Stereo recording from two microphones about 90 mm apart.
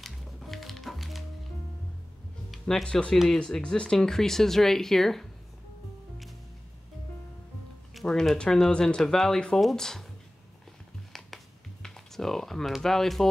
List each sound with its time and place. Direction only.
0.0 s music: centre (ahead or behind)
2.6 s speech: 10° left (ahead or behind)
7.9 s speech: 5° left (ahead or behind)
11.1 s computer keyboard: centre (ahead or behind)